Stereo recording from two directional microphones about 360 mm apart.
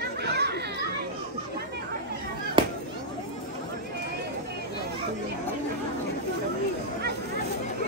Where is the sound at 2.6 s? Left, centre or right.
Centre.